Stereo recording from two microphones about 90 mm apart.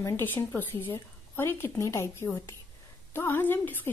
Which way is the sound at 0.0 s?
20° left (ahead or behind).